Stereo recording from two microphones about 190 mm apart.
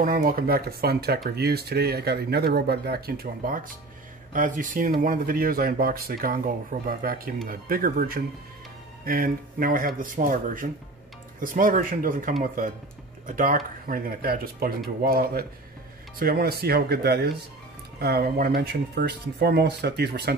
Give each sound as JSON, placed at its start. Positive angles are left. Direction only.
{"t": 0.0, "sound": "speech", "side_deg": -50}
{"t": 13.4, "sound": "speech", "side_deg": -45}